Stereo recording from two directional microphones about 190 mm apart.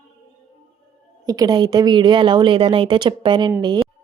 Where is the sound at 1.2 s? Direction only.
20° right (ahead or behind).